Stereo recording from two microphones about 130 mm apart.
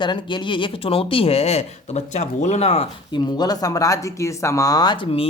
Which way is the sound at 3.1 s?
30° left (ahead or behind).